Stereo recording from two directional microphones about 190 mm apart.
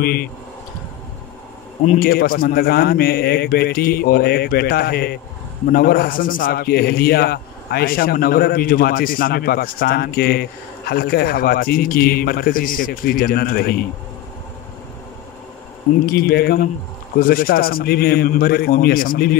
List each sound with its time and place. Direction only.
0.0 s a man's voice: 55° left (ahead or behind)
1.9 s a man's voice: 50° left (ahead or behind)
16.1 s a man's voice: 55° left (ahead or behind)